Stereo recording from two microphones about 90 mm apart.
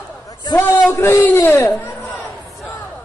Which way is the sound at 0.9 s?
25° left (ahead or behind).